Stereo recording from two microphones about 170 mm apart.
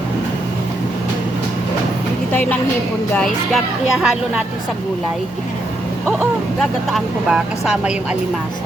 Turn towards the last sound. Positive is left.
turn(degrees=-5)  # may be behind; listen again after turning